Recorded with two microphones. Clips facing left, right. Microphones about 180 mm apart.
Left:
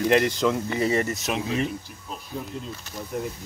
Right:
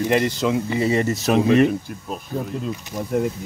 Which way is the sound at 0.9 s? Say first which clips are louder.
Right 5 dB; 25° right (ahead or behind).